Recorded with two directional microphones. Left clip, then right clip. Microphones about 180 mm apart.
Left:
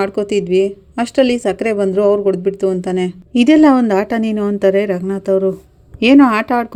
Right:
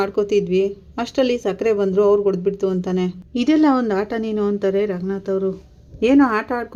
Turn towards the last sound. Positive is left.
turn(degrees=35)  # may be behind; listen again after turning